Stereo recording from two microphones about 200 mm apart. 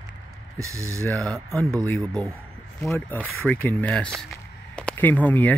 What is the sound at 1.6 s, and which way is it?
Speech, 15° right (ahead or behind).